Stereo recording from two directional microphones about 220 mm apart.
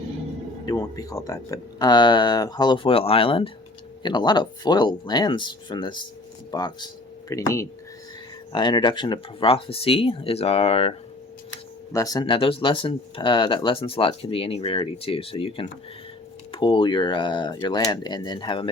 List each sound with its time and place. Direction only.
0.6 s speech: 15° left (ahead or behind)
11.9 s speech: 15° left (ahead or behind)